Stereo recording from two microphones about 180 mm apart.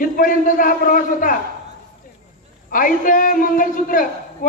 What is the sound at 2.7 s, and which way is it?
A woman's voice, 50° left (ahead or behind).